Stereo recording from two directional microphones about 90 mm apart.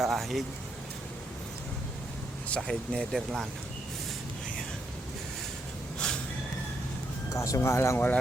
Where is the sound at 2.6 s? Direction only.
10° left (ahead or behind).